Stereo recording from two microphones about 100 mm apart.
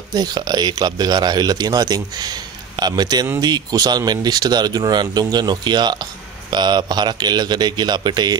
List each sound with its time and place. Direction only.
0.1 s a man's voice: 40° right (ahead or behind)